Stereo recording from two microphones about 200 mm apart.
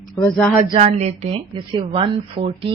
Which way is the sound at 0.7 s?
30° right (ahead or behind).